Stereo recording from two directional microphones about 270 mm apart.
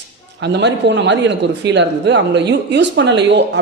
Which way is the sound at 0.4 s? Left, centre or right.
Right.